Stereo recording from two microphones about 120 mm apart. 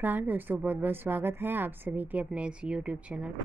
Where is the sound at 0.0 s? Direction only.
15° right (ahead or behind).